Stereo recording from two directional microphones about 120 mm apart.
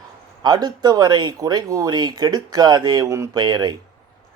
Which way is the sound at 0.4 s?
35° right (ahead or behind).